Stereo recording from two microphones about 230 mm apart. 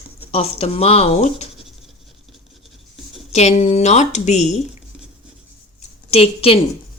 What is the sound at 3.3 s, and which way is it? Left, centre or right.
Speech, left.